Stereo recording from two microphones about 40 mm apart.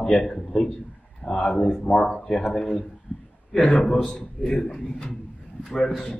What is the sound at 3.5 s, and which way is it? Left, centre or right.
A man's voice, centre.